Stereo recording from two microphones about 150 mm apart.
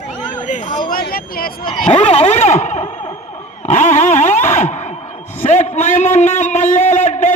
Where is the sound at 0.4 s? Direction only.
50° left (ahead or behind); by 1.6 s 75° left (ahead or behind).